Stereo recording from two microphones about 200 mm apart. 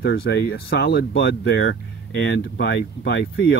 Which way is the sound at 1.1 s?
60° left (ahead or behind).